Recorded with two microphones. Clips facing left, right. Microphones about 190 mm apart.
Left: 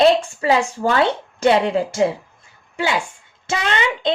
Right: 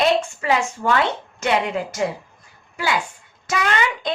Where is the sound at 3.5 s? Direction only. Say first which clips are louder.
Left 1 dB; 25° left (ahead or behind).